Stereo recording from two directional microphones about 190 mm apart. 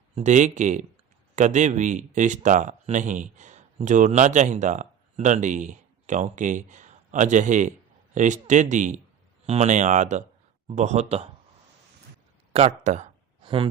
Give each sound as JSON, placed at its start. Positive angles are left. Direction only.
{"t": 0.2, "sound": "speech", "side_deg": -40}
{"t": 12.5, "sound": "speech", "side_deg": -40}
{"t": 13.4, "sound": "a sound", "side_deg": -25}